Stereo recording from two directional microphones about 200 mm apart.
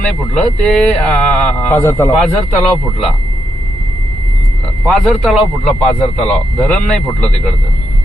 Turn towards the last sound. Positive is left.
turn(degrees=5)  # may be behind; listen again after turning